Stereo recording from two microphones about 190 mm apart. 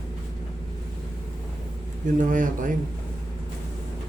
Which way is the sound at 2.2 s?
45° right (ahead or behind).